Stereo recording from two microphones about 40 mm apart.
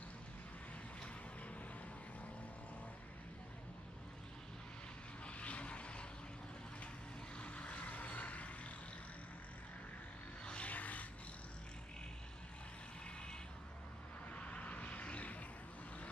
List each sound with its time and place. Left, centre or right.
5.2 s vehicle: left
7.3 s vehicle: left
10.6 s music: left
14.3 s vehicle: left